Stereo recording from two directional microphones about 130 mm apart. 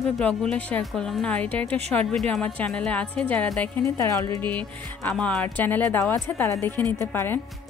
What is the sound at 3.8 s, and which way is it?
Speech, 25° left (ahead or behind).